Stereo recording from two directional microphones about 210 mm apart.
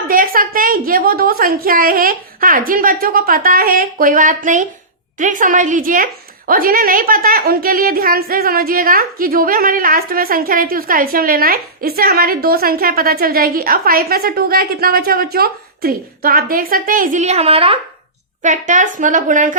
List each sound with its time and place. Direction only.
0.1 s a woman's voice: 40° right (ahead or behind)